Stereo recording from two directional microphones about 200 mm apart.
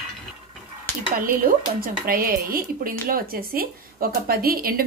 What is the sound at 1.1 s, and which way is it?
Speech, 45° right (ahead or behind).